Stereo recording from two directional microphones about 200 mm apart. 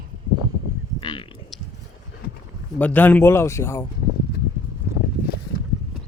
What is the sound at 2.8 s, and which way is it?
Speech, 10° left (ahead or behind).